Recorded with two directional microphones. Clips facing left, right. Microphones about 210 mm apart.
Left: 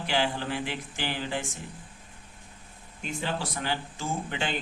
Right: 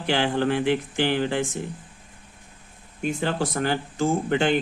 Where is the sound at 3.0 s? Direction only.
50° right (ahead or behind).